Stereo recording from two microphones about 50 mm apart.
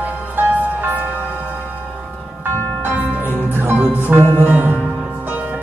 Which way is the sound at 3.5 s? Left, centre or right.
Right.